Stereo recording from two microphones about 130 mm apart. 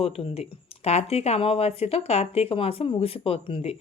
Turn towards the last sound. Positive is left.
turn(degrees=50)  # may be behind; listen again after turning